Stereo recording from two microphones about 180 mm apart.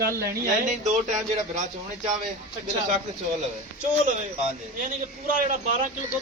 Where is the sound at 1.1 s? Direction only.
40° right (ahead or behind).